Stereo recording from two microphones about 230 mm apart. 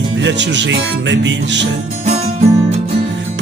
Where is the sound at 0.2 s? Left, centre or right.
Right.